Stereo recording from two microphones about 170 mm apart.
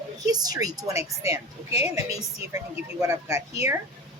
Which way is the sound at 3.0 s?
15° right (ahead or behind).